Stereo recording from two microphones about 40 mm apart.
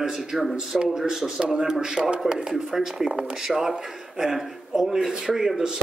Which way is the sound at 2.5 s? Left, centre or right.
Centre.